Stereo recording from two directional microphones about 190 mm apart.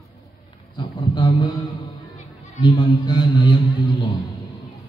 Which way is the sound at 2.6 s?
25° left (ahead or behind).